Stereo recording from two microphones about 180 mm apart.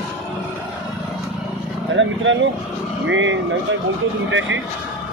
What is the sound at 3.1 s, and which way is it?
Speech, 90° right.